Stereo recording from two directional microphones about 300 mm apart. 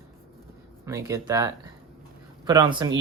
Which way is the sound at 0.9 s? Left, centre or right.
Centre.